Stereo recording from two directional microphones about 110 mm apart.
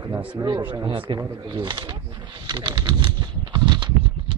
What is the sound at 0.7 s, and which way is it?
Speech, 45° right (ahead or behind).